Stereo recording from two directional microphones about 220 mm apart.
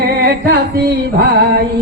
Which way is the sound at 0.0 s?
45° right (ahead or behind).